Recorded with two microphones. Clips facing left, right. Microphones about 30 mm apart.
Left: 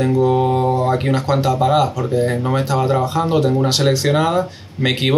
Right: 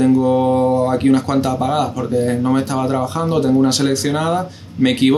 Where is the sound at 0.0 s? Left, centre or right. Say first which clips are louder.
Right 2 dB; centre.